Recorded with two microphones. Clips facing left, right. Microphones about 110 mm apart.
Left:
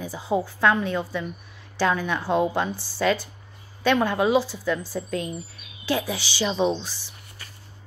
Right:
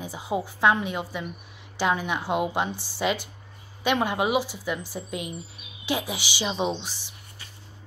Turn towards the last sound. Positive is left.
turn(degrees=-15)  # may be behind; listen again after turning